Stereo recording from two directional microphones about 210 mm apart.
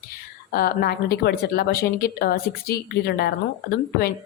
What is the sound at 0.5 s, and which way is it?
Speech, 45° left (ahead or behind).